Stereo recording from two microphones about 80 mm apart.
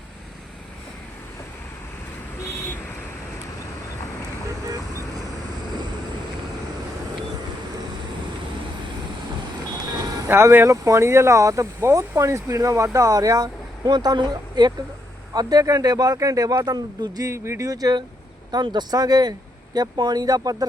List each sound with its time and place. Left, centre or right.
10.2 s speech: right
10.7 s speech: right
15.3 s speech: right
17.2 s speech: right
17.7 s speech: right
18.5 s speech: right